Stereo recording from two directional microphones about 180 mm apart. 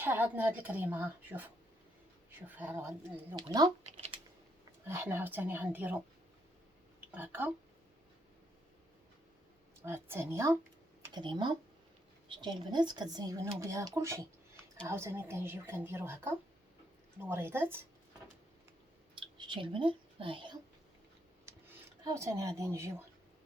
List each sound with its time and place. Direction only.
0.0 s speech: 10° right (ahead or behind)
2.6 s a woman's voice: 10° right (ahead or behind)
4.9 s speech: 10° right (ahead or behind)
7.1 s speech: 10° right (ahead or behind)
9.8 s speech: 15° right (ahead or behind)
11.0 s a woman's voice: 25° right (ahead or behind)
19.5 s a woman's voice: 30° right (ahead or behind)
21.5 s computer keyboard: 15° right (ahead or behind)
22.0 s speech: 15° right (ahead or behind)